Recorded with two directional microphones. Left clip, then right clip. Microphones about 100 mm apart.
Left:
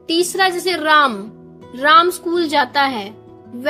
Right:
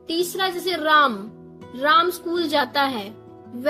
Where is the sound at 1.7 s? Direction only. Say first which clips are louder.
Left 6 dB; 85° left.